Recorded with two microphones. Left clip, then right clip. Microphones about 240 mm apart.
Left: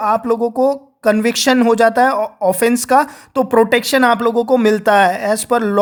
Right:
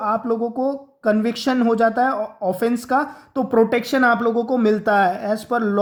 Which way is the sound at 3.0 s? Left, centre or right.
Left.